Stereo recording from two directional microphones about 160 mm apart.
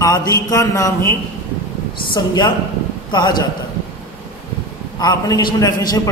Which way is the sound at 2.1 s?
30° left (ahead or behind).